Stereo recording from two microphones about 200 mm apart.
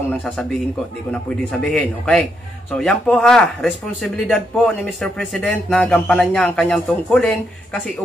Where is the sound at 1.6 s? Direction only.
5° left (ahead or behind).